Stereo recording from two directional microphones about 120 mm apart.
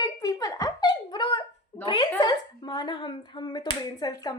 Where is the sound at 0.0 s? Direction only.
30° left (ahead or behind).